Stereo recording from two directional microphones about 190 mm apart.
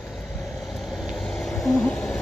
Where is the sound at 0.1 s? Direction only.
Centre (ahead or behind).